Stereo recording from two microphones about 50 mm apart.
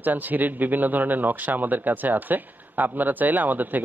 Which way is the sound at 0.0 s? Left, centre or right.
Right.